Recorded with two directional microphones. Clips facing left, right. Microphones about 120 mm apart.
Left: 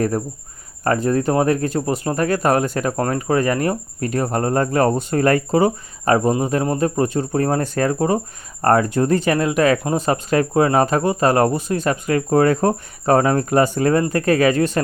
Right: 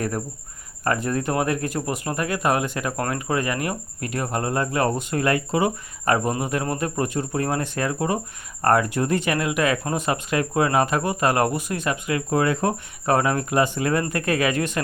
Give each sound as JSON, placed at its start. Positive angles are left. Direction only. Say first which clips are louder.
{"t": 0.9, "sound": "speech", "louder": "left 6 dB", "side_deg": 35}